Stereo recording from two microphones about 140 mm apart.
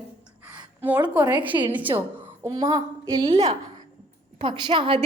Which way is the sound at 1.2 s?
30° right (ahead or behind).